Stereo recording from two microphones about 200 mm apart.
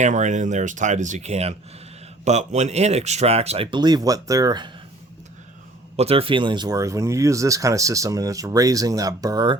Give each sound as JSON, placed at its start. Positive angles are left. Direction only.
{"t": 0.0, "sound": "speech", "side_deg": -40}
{"t": 6.0, "sound": "speech", "side_deg": -30}